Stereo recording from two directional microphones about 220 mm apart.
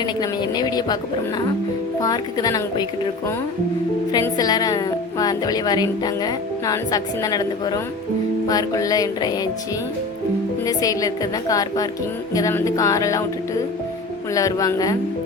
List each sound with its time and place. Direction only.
0.0 s a woman's voice: 20° left (ahead or behind)
2.0 s a woman's voice: 15° left (ahead or behind)
4.1 s a woman's voice: 15° left (ahead or behind)
10.7 s a woman's voice: 15° left (ahead or behind)
14.3 s a woman's voice: 15° left (ahead or behind)